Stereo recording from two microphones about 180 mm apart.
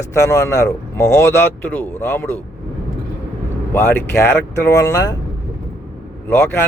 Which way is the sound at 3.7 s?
10° left (ahead or behind).